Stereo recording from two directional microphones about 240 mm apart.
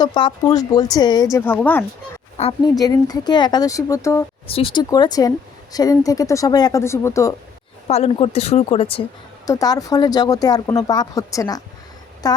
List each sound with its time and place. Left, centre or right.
0.0 s speech: centre
2.4 s speech: centre
7.9 s speech: left